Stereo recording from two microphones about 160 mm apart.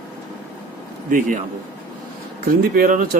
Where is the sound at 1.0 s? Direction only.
60° right (ahead or behind).